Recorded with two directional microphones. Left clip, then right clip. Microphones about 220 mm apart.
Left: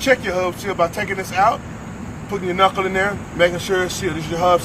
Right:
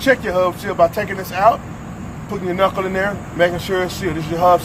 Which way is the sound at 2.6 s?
40° right (ahead or behind).